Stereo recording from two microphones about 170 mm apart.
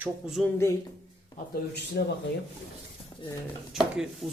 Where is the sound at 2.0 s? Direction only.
65° left (ahead or behind).